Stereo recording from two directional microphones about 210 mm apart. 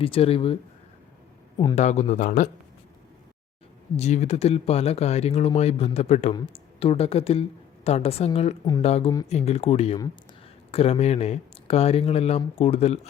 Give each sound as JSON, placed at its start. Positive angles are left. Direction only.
{"t": 0.0, "sound": "speech", "side_deg": 25}
{"t": 1.7, "sound": "speech", "side_deg": 35}
{"t": 3.9, "sound": "speech", "side_deg": 30}